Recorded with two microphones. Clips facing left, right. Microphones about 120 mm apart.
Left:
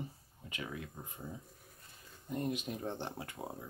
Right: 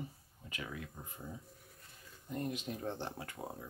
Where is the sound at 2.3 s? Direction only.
20° left (ahead or behind).